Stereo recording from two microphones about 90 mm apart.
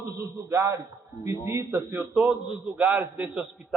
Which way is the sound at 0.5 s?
35° right (ahead or behind).